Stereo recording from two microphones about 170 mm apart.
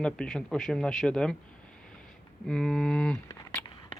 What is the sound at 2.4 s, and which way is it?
Speech, centre (ahead or behind).